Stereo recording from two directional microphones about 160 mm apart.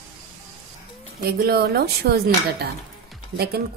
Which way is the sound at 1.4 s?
85° right.